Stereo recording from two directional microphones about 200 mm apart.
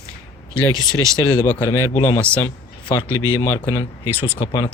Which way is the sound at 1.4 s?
15° left (ahead or behind).